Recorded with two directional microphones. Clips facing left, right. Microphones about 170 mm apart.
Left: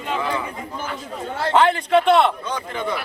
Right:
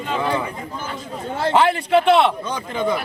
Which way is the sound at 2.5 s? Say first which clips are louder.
Right 4 dB; 20° right (ahead or behind).